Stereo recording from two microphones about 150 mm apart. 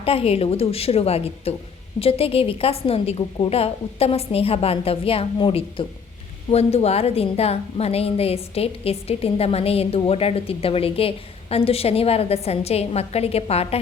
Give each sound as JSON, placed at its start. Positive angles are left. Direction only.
{"t": 0.0, "sound": "a woman's voice", "side_deg": 40}